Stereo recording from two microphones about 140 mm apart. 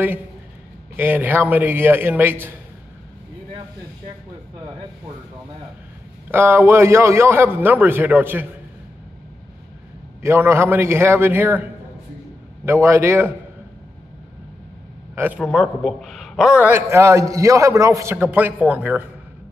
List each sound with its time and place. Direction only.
0.9 s a man's voice: 15° right (ahead or behind)
6.3 s a man's voice: 15° right (ahead or behind)
10.2 s a man's voice: 20° right (ahead or behind)
15.1 s a man's voice: 10° right (ahead or behind)